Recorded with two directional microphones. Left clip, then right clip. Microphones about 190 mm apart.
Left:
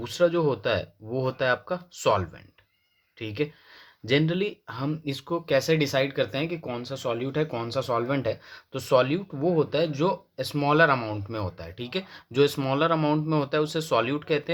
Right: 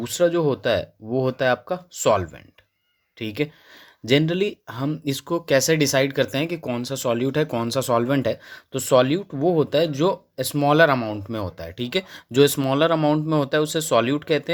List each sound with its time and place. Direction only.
0.0 s speech: 30° right (ahead or behind)